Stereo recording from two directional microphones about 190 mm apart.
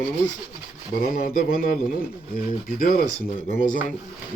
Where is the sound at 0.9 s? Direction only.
50° left (ahead or behind).